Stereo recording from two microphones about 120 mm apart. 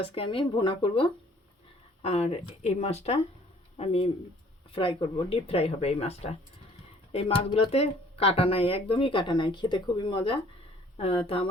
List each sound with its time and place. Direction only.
0.0 s speech: 50° left (ahead or behind)
2.0 s speech: 60° left (ahead or behind)
4.7 s speech: 45° left (ahead or behind)